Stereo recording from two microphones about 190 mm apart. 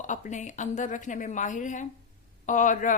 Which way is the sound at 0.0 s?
40° left (ahead or behind).